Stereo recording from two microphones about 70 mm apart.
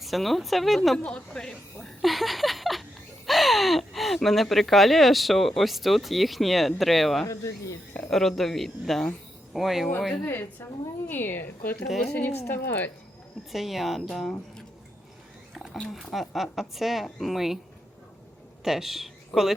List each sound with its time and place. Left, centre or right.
0.0 s speech: centre
0.9 s speech: centre
7.3 s speech: left
7.9 s speech: centre
10.6 s a woman's voice: left
11.9 s speech: centre
12.5 s speech: left
13.5 s speech: centre
15.5 s a sound: centre
16.1 s speech: centre
18.6 s a woman's voice: centre